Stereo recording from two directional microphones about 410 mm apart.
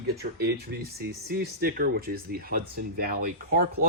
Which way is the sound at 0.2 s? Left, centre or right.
Right.